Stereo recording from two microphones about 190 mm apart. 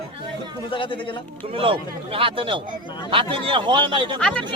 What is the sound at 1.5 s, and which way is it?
Speech, 30° right (ahead or behind).